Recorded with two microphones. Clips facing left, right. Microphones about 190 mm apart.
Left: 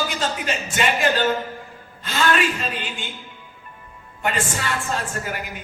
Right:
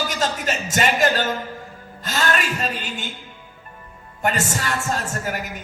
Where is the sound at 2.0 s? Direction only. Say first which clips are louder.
Left 2 dB; 40° right (ahead or behind).